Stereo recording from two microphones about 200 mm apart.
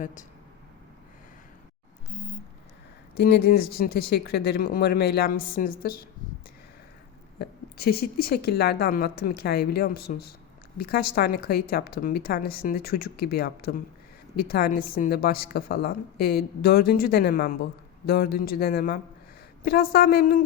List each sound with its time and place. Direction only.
0.0 s speech: 40° left (ahead or behind)
3.2 s a woman's voice: 50° left (ahead or behind)
7.3 s a woman's voice: 50° left (ahead or behind)